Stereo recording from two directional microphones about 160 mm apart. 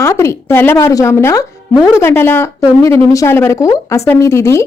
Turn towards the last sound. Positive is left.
turn(degrees=15)  # may be behind; listen again after turning